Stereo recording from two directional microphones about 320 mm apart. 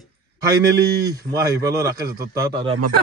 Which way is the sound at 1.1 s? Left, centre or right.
Centre.